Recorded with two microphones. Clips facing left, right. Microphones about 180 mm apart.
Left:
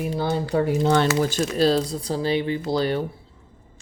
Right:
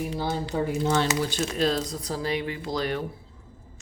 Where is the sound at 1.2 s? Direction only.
40° left (ahead or behind).